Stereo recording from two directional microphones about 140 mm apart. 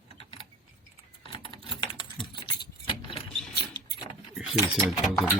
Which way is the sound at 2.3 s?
35° left (ahead or behind).